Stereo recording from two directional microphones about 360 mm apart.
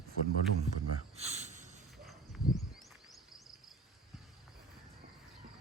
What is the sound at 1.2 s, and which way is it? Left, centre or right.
Speech, centre.